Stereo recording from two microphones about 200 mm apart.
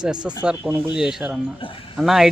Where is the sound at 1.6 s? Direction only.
25° left (ahead or behind).